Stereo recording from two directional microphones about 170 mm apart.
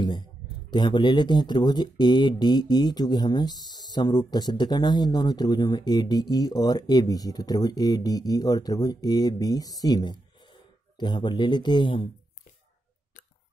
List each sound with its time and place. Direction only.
0.7 s speech: 25° left (ahead or behind)